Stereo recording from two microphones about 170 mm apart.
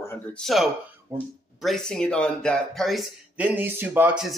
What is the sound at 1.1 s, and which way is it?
Speech, 15° right (ahead or behind).